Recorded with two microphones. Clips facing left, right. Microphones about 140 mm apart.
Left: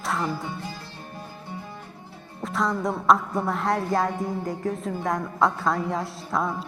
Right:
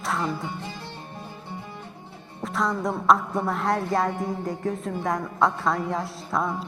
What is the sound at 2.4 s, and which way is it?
Music, centre (ahead or behind).